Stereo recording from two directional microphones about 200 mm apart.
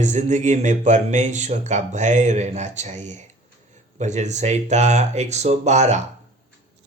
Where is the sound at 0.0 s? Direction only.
35° right (ahead or behind).